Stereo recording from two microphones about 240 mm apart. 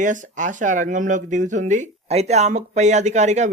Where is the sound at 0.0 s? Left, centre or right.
Right.